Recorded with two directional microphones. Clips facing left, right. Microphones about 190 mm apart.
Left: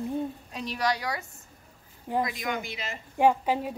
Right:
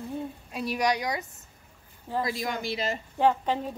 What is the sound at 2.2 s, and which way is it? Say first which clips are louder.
Speech: right 1 dB; 35° right (ahead or behind).